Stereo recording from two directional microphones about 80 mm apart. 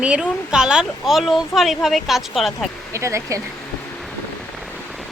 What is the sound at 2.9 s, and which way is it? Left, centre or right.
Speech, right.